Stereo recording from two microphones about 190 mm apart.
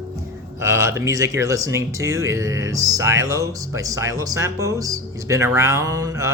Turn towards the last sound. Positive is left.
turn(degrees=-15)  # may be behind; listen again after turning